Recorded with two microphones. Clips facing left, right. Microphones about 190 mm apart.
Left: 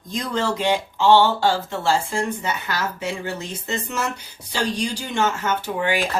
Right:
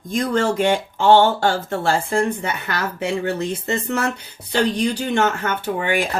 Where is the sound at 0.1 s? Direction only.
50° right (ahead or behind).